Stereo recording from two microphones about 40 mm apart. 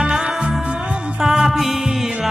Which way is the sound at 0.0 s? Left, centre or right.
Centre.